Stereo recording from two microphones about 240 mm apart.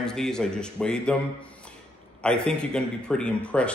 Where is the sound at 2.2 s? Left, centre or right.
Centre.